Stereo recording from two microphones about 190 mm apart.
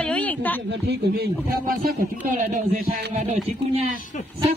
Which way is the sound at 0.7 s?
60° right (ahead or behind).